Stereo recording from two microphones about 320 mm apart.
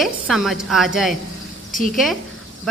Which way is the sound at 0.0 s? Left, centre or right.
Centre.